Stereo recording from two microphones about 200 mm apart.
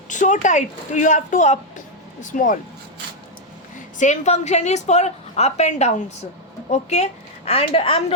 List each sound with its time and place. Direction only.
0.1 s a woman's voice: 40° left (ahead or behind)
3.9 s a woman's voice: 35° left (ahead or behind)